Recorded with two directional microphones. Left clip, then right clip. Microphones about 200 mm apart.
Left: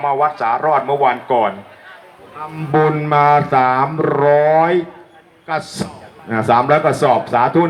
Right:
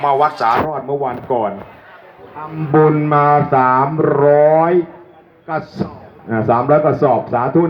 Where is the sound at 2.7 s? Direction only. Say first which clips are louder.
Right 2 dB; 15° right (ahead or behind).